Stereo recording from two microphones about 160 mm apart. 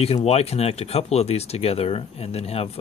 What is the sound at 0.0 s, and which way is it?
Speech, 40° left (ahead or behind).